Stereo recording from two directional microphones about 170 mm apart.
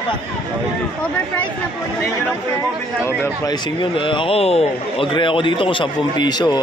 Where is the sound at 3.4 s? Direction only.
30° left (ahead or behind).